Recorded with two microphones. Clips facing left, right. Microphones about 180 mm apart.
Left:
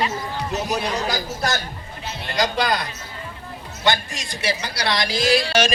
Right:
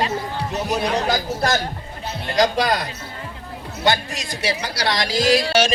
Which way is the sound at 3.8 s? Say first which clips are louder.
Right 2 dB; 40° right (ahead or behind).